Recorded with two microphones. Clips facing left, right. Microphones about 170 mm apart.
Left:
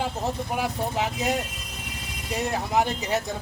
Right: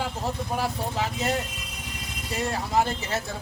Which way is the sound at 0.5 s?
15° left (ahead or behind).